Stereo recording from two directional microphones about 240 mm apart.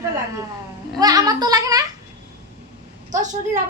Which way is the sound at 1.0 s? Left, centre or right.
Centre.